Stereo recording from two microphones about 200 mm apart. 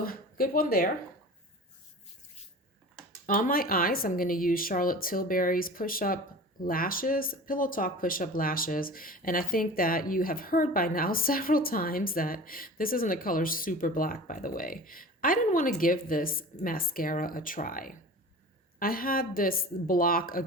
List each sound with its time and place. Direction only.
0.0 s speech: 45° left (ahead or behind)
3.2 s speech: 45° left (ahead or behind)